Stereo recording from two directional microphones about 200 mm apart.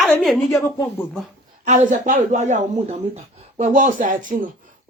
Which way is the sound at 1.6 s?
40° right (ahead or behind).